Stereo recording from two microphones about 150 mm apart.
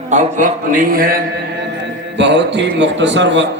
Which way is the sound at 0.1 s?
55° right (ahead or behind).